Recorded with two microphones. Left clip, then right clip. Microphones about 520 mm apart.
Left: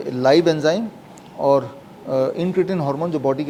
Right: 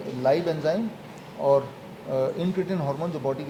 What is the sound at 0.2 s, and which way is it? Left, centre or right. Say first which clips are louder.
Speech: left 8 dB; left.